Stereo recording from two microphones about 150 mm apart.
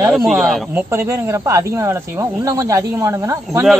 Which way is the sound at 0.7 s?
15° right (ahead or behind).